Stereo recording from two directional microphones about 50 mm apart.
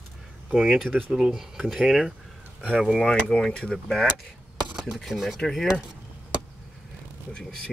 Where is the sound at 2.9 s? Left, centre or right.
Left.